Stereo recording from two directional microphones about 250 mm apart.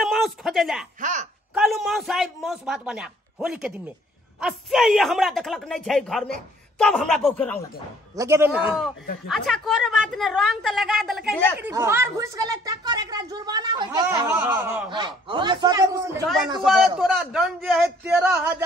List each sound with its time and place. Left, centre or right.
0.0 s a sound: centre
1.5 s a man's voice: centre
8.2 s a woman's voice: centre
11.6 s a woman's voice: centre
14.9 s a woman's voice: centre
16.6 s a man's voice: centre